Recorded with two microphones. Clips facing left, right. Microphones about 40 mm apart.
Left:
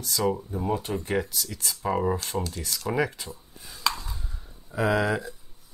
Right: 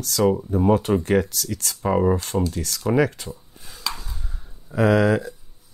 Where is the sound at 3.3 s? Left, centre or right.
Centre.